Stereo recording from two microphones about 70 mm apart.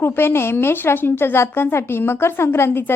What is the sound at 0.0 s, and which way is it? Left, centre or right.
A woman's voice, left.